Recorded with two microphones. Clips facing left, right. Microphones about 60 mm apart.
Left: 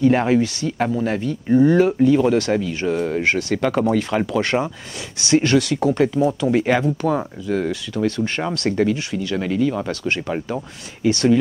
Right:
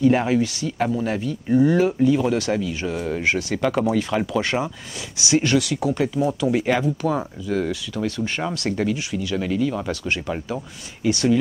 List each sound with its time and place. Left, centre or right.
0.0 s speech: centre
6.6 s speech: centre